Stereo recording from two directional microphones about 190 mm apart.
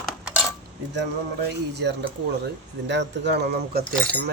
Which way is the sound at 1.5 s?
65° right (ahead or behind).